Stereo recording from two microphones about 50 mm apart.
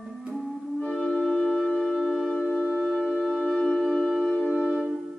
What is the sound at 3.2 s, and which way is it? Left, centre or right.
Music, centre.